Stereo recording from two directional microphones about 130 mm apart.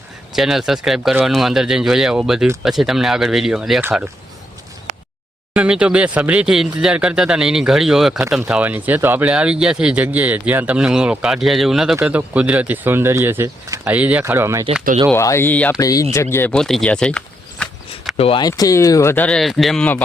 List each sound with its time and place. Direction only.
0.3 s speech: 5° right (ahead or behind)
5.5 s speech: 10° right (ahead or behind)
15.1 s speech: 20° left (ahead or behind)
15.8 s speech: 25° left (ahead or behind)
16.6 s speech: 5° left (ahead or behind)
18.2 s speech: 45° left (ahead or behind)
18.4 s speech: 30° left (ahead or behind)
19.1 s speech: 10° left (ahead or behind)